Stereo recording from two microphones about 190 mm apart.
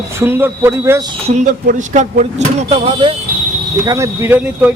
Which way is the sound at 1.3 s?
40° right (ahead or behind).